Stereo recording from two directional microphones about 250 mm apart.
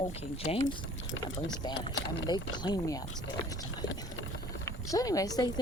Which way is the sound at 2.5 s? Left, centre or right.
Centre.